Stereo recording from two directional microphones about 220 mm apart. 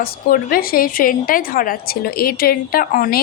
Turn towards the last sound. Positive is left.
turn(degrees=40)  # may be behind; listen again after turning